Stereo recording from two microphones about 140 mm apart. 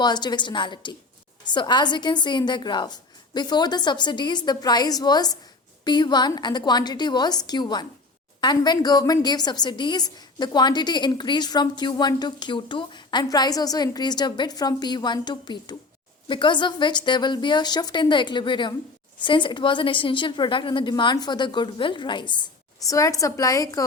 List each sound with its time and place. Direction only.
0.0 s a woman's voice: 30° left (ahead or behind)